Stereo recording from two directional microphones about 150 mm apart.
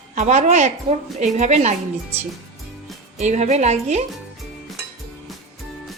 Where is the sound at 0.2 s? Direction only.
50° right (ahead or behind).